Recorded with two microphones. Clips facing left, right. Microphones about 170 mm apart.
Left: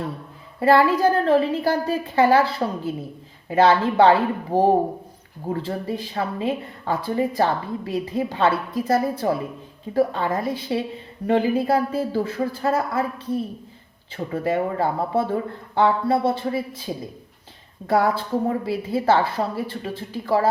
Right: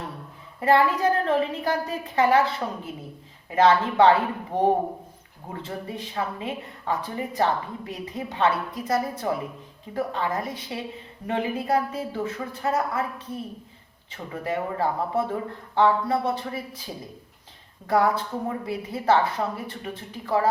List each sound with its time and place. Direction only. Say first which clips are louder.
0.6 s speech: left 4 dB; 30° left (ahead or behind)